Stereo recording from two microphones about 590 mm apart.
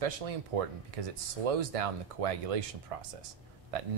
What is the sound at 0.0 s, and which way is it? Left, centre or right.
Speech, right.